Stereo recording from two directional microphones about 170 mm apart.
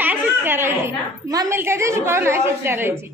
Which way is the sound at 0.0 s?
10° right (ahead or behind).